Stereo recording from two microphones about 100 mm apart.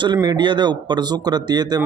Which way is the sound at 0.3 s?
50° right (ahead or behind).